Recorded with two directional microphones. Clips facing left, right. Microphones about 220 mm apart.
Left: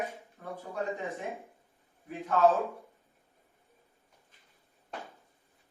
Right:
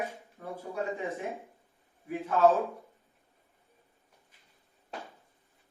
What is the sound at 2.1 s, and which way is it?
Speech, 15° right (ahead or behind).